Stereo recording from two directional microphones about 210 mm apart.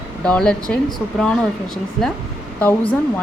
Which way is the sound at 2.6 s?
10° left (ahead or behind).